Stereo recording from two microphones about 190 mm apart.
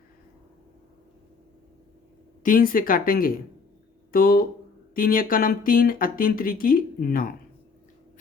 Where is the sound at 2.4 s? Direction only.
45° left (ahead or behind).